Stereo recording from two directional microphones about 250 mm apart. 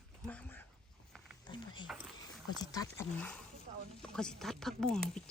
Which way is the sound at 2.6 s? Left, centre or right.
Centre.